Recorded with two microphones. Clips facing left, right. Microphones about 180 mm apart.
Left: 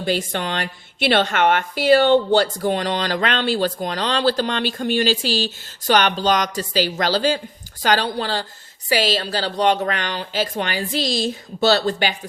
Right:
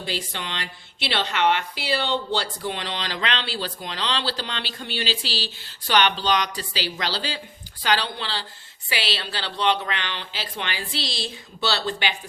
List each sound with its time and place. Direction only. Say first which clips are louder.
0.0 s speech: left 9 dB; 50° left (ahead or behind)